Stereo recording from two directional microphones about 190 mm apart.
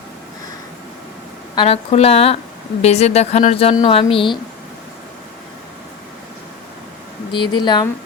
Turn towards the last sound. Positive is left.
turn(degrees=25)  # may be behind; listen again after turning